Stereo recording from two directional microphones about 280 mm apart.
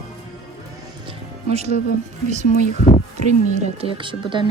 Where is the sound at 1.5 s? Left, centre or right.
Right.